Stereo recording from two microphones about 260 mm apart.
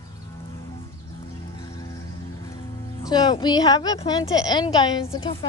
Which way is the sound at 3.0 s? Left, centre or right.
Centre.